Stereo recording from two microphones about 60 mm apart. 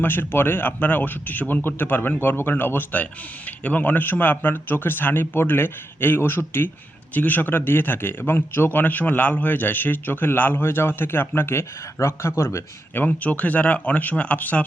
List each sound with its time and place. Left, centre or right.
0.0 s a man's voice: left
7.1 s a man's voice: left
13.1 s speech: left